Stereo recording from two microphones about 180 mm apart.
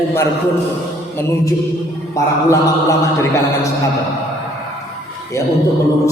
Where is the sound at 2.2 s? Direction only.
15° left (ahead or behind).